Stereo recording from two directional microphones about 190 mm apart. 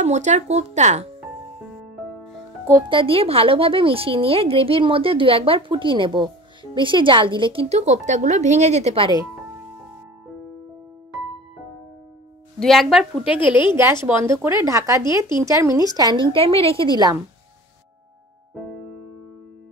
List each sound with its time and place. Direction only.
0.0 s speech: 40° right (ahead or behind)
2.9 s a woman's voice: 30° right (ahead or behind)
12.5 s a woman's voice: centre (ahead or behind)
13.4 s a woman's voice: 25° left (ahead or behind)
14.0 s a woman's voice: 15° right (ahead or behind); by 16.8 s 30° right (ahead or behind)